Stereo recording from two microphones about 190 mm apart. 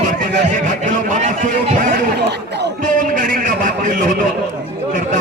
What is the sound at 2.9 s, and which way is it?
A man's voice, 45° right (ahead or behind).